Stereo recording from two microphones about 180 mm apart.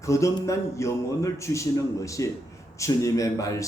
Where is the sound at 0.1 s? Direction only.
15° left (ahead or behind).